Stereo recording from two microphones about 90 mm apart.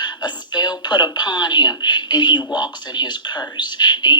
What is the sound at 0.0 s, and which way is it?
Speech, 55° left (ahead or behind).